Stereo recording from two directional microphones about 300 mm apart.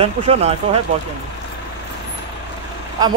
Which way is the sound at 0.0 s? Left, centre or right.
Centre.